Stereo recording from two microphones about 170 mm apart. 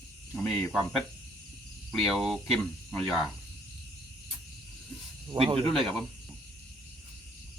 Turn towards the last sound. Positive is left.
turn(degrees=0)  # may be behind; listen again after turning